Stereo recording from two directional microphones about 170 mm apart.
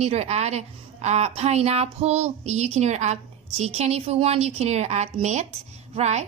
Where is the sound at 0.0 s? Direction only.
40° right (ahead or behind).